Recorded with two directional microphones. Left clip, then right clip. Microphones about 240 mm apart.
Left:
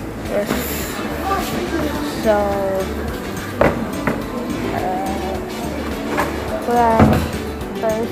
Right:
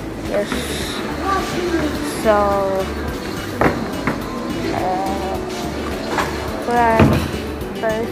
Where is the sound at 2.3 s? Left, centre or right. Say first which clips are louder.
Right 1 dB; centre.